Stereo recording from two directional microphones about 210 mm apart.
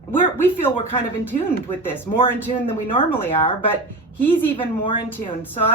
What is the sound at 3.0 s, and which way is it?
Speech, 10° left (ahead or behind).